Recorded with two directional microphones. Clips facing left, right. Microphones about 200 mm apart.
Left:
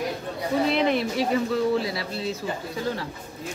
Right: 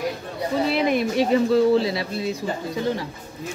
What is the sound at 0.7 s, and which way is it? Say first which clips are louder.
Speech: right 3 dB; 10° right (ahead or behind).